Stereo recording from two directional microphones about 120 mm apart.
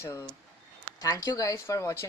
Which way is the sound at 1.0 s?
30° left (ahead or behind).